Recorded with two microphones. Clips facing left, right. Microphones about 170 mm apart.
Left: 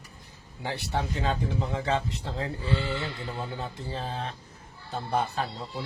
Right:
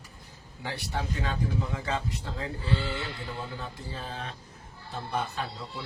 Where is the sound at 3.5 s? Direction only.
30° left (ahead or behind).